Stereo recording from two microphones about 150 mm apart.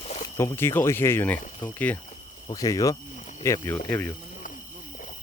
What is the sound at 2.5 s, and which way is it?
Speech, 25° left (ahead or behind).